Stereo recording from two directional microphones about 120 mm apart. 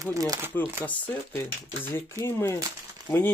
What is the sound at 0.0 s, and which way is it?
Speech, 30° right (ahead or behind).